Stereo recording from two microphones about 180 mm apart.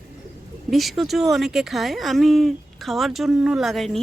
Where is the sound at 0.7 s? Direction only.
Centre (ahead or behind).